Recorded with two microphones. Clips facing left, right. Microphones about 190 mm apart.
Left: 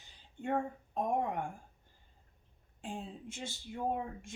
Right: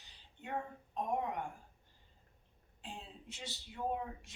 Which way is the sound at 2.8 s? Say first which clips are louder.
Left 7 dB; 50° left (ahead or behind).